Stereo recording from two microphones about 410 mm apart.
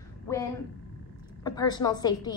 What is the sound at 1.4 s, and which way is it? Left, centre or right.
Speech, centre.